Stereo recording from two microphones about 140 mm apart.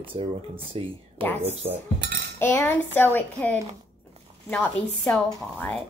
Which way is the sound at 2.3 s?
15° left (ahead or behind).